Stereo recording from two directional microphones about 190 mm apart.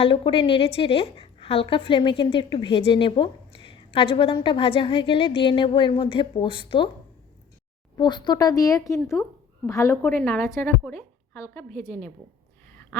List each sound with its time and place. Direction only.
0.0 s a woman's voice: 25° left (ahead or behind)
7.9 s a woman's voice: 25° left (ahead or behind)